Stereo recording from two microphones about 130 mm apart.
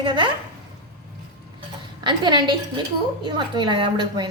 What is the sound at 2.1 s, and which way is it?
A woman's voice, 35° right (ahead or behind).